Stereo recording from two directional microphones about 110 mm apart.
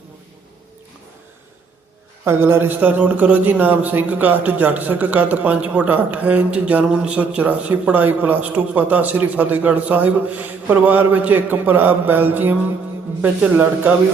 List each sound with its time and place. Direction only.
2.2 s a man's voice: 20° right (ahead or behind)